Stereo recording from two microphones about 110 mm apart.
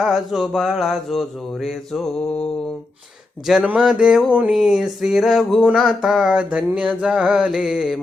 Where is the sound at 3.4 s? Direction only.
5° right (ahead or behind).